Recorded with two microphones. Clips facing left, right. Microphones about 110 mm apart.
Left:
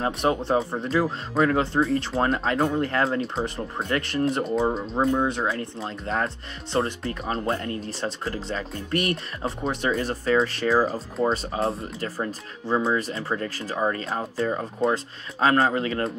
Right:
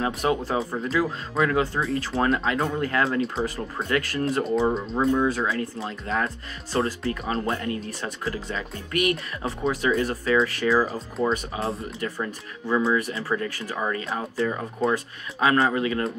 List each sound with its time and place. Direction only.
0.0 s speech: 30° left (ahead or behind)